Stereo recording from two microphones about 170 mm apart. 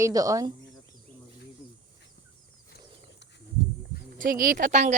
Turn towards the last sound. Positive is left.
turn(degrees=-45)  # may be behind; listen again after turning